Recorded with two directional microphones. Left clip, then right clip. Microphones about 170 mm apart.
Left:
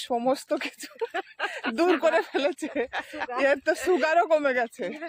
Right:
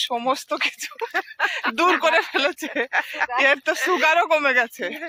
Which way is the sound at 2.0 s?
35° left (ahead or behind).